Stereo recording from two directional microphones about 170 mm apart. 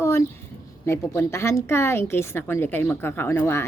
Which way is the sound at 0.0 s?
15° left (ahead or behind).